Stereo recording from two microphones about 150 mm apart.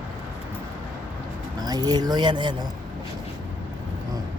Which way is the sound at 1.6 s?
25° right (ahead or behind).